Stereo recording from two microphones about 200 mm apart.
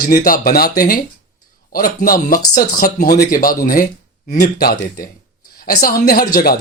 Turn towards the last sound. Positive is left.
turn(degrees=50)  # may be behind; listen again after turning